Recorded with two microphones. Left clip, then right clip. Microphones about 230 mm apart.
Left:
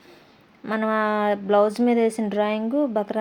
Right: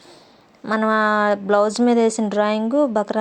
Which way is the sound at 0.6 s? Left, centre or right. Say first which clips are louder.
Right 5 dB; centre.